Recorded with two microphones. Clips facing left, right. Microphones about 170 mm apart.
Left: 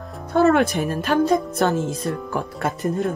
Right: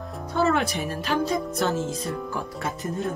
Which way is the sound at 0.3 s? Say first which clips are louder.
Left 7 dB; 55° left (ahead or behind).